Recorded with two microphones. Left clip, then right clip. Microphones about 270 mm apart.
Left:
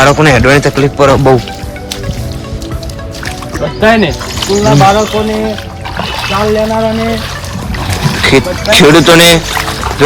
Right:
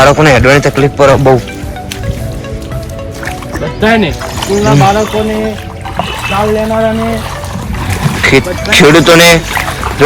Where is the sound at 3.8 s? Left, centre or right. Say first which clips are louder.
Left 2 dB; centre.